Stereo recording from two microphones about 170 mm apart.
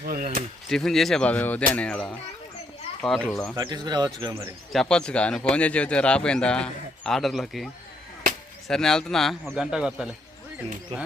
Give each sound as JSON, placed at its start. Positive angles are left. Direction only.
{"t": 0.0, "sound": "speech", "side_deg": -55}
{"t": 0.7, "sound": "a man's voice", "side_deg": 0}
{"t": 3.5, "sound": "speech", "side_deg": -20}
{"t": 4.7, "sound": "a man's voice", "side_deg": 5}